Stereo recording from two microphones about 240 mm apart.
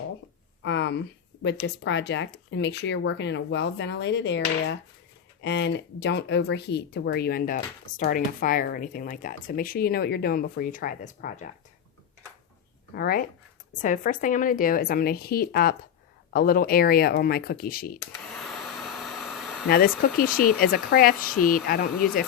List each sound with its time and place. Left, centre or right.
0.6 s speech: left
12.9 s speech: left
18.3 s a sound: centre
19.6 s speech: left